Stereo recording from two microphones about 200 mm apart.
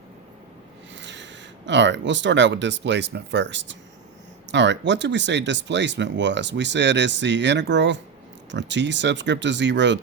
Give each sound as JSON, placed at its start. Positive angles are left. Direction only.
{"t": 0.9, "sound": "speech", "side_deg": -65}